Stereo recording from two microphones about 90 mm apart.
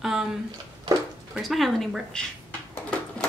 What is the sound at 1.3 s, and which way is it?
Speech, centre (ahead or behind).